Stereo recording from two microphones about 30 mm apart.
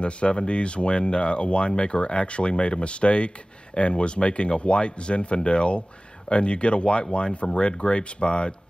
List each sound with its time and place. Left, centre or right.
0.0 s speech: left